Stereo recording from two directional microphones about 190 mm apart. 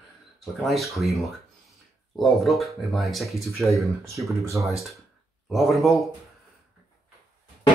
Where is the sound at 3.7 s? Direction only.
15° right (ahead or behind).